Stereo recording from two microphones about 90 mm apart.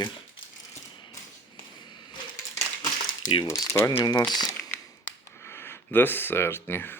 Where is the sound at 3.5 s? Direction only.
35° left (ahead or behind).